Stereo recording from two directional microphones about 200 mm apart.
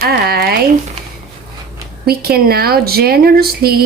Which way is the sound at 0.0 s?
50° right (ahead or behind).